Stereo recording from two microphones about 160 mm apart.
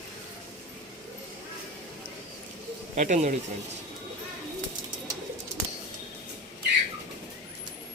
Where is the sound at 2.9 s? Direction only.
45° right (ahead or behind).